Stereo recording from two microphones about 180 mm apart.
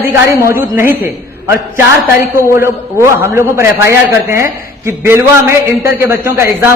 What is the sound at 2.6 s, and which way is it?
A man's voice, 15° right (ahead or behind).